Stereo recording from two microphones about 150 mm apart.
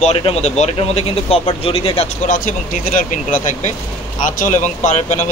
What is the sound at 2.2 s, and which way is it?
A man's voice, 65° left (ahead or behind).